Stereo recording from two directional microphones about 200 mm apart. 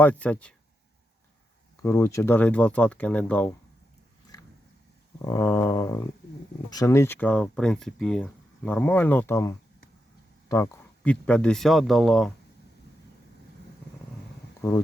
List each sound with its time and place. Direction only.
0.0 s speech: 10° left (ahead or behind)
1.8 s speech: 15° left (ahead or behind)
5.2 s speech: 15° left (ahead or behind)